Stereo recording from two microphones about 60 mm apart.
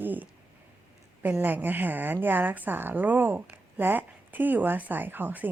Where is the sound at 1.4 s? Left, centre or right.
Right.